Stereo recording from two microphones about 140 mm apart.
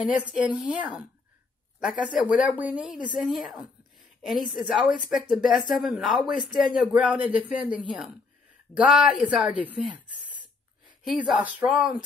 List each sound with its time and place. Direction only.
0.0 s a man's voice: 10° right (ahead or behind)
9.9 s a sound: 10° right (ahead or behind)
11.1 s speech: 10° right (ahead or behind)